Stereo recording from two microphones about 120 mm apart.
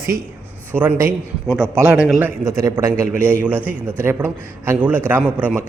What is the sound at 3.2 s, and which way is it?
Speech, 10° left (ahead or behind).